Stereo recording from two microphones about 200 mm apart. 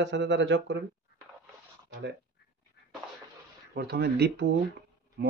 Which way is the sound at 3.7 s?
55° right (ahead or behind).